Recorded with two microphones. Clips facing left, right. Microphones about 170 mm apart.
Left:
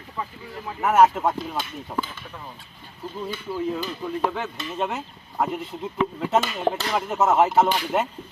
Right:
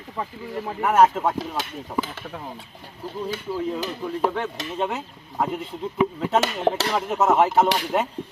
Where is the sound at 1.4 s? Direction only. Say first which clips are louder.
Right 1 dB; 90° right.